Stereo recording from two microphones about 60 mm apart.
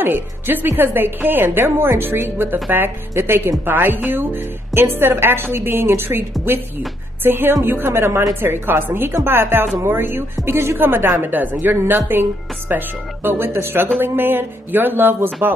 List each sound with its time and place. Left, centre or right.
0.0 s a woman's voice: right
7.2 s a woman's voice: right